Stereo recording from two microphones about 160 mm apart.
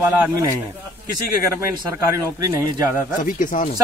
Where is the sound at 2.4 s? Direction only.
25° right (ahead or behind).